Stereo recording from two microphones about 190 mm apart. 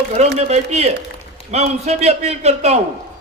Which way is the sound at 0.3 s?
35° right (ahead or behind).